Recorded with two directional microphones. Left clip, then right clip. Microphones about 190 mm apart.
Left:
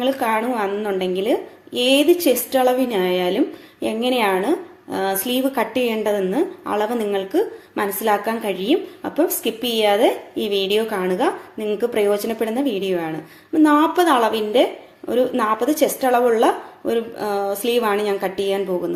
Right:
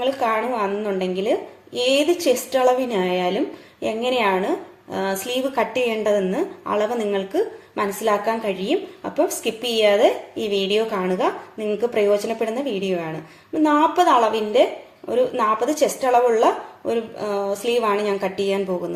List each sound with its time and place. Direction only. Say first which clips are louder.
0.0 s a woman's voice: left 1 dB; 20° left (ahead or behind)